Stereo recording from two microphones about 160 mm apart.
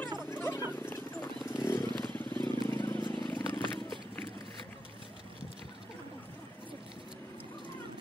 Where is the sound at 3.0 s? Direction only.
30° left (ahead or behind).